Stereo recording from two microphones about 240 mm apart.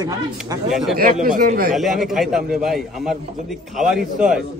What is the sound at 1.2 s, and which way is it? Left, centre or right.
Speech, right.